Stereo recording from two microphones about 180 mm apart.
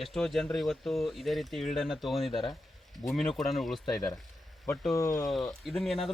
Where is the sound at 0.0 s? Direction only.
Centre (ahead or behind).